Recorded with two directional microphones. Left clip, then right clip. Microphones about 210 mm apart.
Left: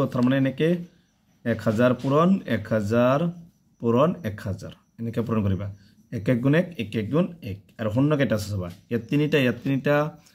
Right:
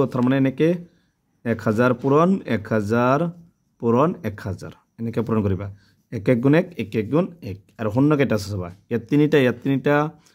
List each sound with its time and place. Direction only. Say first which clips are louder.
0.0 s speech: right 3 dB; 55° right (ahead or behind)